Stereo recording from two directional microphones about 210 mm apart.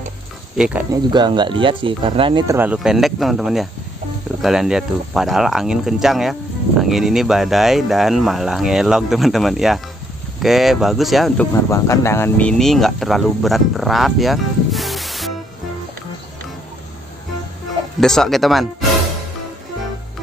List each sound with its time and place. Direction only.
0.6 s speech: 5° right (ahead or behind)
1.1 s speech: 20° right (ahead or behind)
2.5 s speech: 5° right (ahead or behind)
11.7 s speech: 15° left (ahead or behind)
18.0 s speech: centre (ahead or behind)